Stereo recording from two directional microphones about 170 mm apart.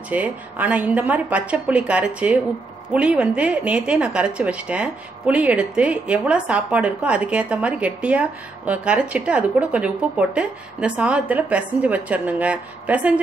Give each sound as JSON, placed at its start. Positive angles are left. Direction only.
{"t": 0.1, "sound": "a woman's voice", "side_deg": -10}